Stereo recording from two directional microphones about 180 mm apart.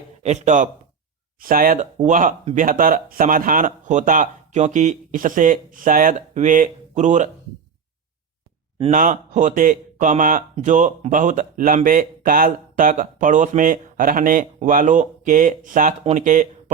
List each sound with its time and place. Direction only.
0.2 s speech: 40° right (ahead or behind)
8.9 s speech: 45° right (ahead or behind)